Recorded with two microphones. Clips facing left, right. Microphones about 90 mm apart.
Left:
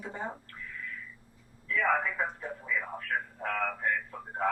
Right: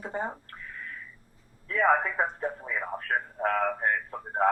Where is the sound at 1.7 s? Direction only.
40° right (ahead or behind).